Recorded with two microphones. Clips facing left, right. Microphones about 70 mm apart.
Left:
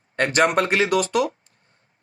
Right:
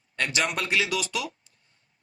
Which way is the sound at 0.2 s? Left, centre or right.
Left.